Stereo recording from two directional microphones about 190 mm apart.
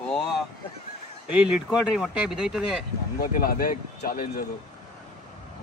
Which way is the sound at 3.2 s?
50° left (ahead or behind).